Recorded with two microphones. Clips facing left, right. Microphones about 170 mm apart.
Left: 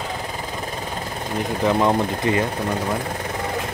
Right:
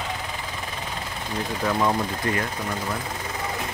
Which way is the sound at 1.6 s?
20° left (ahead or behind).